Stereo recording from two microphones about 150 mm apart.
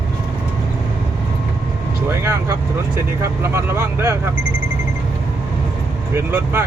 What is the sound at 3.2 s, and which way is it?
Speech, 15° right (ahead or behind).